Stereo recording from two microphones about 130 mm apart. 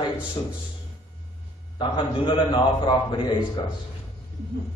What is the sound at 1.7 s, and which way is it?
A man's voice, 40° left (ahead or behind).